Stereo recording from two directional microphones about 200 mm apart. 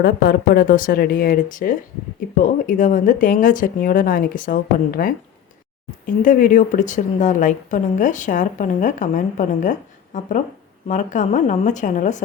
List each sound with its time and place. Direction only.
0.0 s speech: 45° left (ahead or behind)
6.2 s a woman's voice: 40° left (ahead or behind)